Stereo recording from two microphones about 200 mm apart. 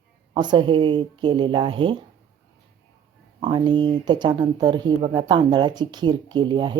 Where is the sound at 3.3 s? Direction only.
25° right (ahead or behind).